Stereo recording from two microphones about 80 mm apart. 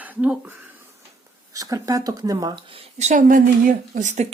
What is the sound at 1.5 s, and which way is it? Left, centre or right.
Speech, right.